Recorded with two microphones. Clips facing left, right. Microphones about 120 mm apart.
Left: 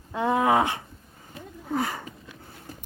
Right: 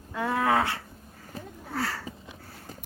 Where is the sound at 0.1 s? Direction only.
20° left (ahead or behind).